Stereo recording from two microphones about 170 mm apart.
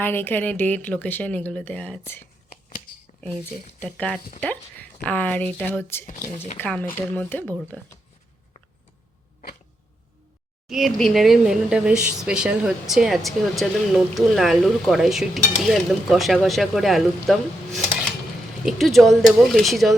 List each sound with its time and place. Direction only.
0.0 s speech: 15° left (ahead or behind)
2.5 s a sound: 45° left (ahead or behind)
3.8 s speech: 5° left (ahead or behind)
6.1 s speech: 50° left (ahead or behind)
6.6 s speech: 10° left (ahead or behind)
10.7 s speech: centre (ahead or behind)
18.6 s speech: centre (ahead or behind)